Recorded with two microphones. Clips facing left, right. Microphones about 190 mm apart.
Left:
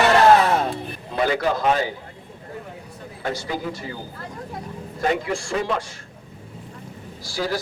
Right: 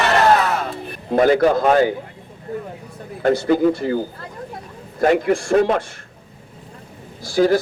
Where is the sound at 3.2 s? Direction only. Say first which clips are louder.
Right 12 dB; 55° right (ahead or behind).